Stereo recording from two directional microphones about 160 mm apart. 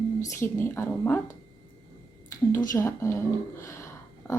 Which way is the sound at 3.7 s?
15° left (ahead or behind).